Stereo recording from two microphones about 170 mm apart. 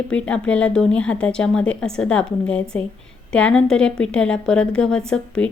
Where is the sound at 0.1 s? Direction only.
5° left (ahead or behind).